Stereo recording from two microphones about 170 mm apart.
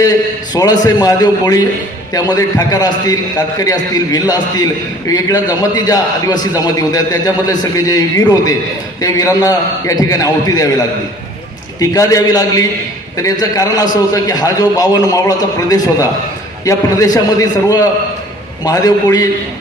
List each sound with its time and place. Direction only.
0.5 s a man's voice: 20° left (ahead or behind)
11.8 s a man's voice: 20° left (ahead or behind)